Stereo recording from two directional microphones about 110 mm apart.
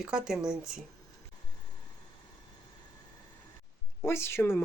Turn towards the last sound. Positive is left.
turn(degrees=25)  # may be behind; listen again after turning